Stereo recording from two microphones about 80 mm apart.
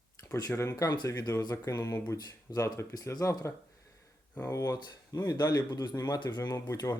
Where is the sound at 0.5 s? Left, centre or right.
Left.